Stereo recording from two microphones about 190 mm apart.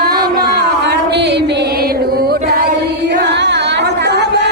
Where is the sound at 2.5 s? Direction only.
55° right (ahead or behind).